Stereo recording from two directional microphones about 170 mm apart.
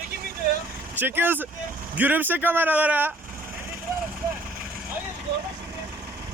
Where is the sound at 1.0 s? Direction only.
10° right (ahead or behind).